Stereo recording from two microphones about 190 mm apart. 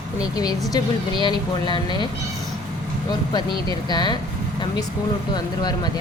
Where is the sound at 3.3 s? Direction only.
20° left (ahead or behind).